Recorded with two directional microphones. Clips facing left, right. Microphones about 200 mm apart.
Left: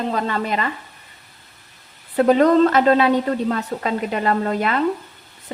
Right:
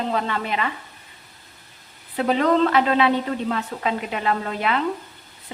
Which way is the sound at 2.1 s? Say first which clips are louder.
Left 5 dB; 45° left (ahead or behind).